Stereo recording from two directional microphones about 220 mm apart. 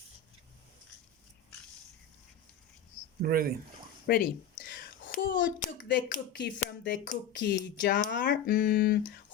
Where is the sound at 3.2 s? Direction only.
40° right (ahead or behind).